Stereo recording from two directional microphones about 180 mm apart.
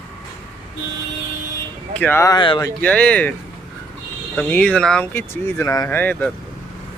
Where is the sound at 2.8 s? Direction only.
5° left (ahead or behind).